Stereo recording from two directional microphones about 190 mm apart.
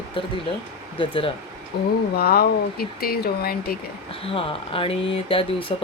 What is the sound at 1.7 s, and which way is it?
Speech, 55° left (ahead or behind).